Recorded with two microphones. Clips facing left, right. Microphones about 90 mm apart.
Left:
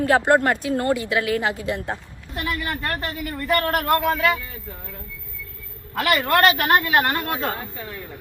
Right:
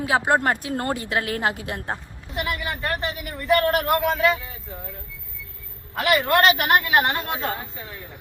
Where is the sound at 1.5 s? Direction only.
50° right (ahead or behind).